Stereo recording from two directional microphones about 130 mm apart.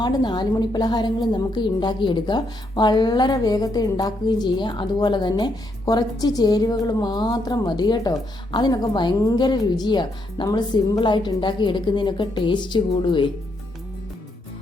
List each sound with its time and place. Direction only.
0.0 s a woman's voice: 35° left (ahead or behind)